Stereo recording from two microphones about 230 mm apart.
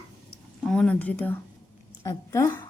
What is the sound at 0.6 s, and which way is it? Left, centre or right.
A woman's voice, centre.